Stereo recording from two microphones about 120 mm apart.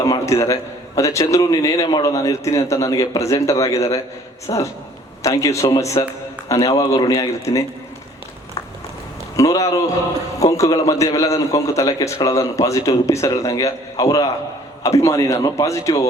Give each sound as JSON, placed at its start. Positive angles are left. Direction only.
{"t": 0.0, "sound": "a man's voice", "side_deg": 25}
{"t": 9.3, "sound": "a man's voice", "side_deg": 25}